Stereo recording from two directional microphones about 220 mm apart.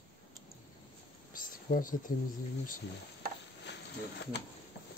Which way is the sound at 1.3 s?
40° left (ahead or behind).